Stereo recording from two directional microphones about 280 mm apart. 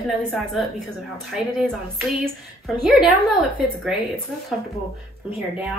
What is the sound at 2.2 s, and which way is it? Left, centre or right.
A woman's voice, centre.